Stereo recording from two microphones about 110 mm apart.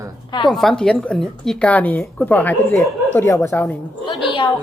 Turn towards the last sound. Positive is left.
turn(degrees=50)  # may be behind; listen again after turning